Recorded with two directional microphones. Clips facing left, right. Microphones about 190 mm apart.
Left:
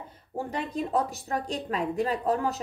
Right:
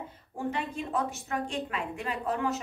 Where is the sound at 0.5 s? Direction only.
35° left (ahead or behind).